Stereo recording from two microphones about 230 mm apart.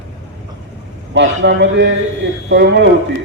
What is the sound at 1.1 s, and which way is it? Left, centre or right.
A man's voice, right.